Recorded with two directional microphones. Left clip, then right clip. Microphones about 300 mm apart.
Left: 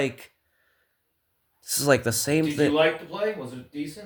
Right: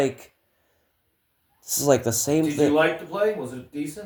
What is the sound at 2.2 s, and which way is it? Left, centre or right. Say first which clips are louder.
Speech: right 2 dB; left.